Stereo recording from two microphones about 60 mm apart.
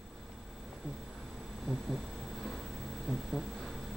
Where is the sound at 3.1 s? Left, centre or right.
Centre.